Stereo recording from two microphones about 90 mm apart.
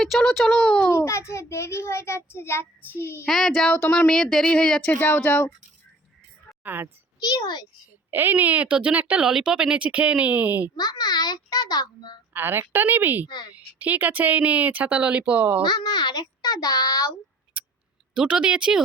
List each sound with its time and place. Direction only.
0.0 s a child's voice: centre (ahead or behind)
0.9 s a child's voice: 30° left (ahead or behind)
1.3 s child singing: 30° left (ahead or behind)
3.2 s speech: 5° left (ahead or behind)
6.6 s a woman's voice: 20° right (ahead or behind)
7.2 s a child's voice: 50° left (ahead or behind)
8.1 s speech: 20° right (ahead or behind)
10.8 s a child's voice: 50° left (ahead or behind)
12.3 s a woman's voice: 25° right (ahead or behind)
13.2 s a woman's voice: 55° left (ahead or behind)
13.5 s speech: 15° right (ahead or behind)
15.6 s a child's voice: 55° left (ahead or behind)
18.1 s speech: 10° right (ahead or behind)